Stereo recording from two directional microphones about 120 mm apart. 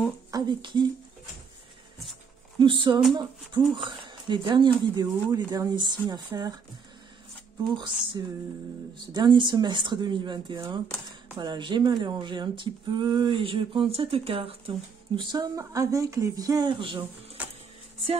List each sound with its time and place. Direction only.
0.3 s speech: 35° right (ahead or behind)
2.6 s speech: 45° right (ahead or behind)
7.7 s speech: 40° right (ahead or behind)
15.3 s speech: 30° right (ahead or behind)
17.4 s a sound: 15° right (ahead or behind)